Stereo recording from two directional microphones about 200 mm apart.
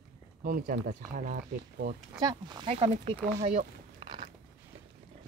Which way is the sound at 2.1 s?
20° right (ahead or behind).